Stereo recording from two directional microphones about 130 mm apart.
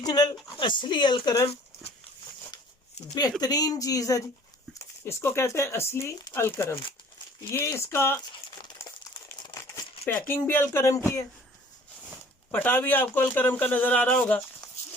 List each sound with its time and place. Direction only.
0.0 s a sound: 30° left (ahead or behind)
0.5 s speech: 35° left (ahead or behind)
3.4 s speech: 30° left (ahead or behind)
8.8 s crumpling: 25° left (ahead or behind)
10.2 s speech: 15° left (ahead or behind)
12.5 s a man's voice: 15° left (ahead or behind)